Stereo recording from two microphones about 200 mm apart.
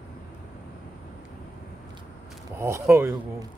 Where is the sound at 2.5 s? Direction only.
15° right (ahead or behind).